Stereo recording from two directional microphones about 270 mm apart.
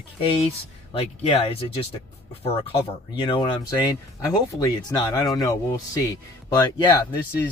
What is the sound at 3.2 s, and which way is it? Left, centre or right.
Speech, centre.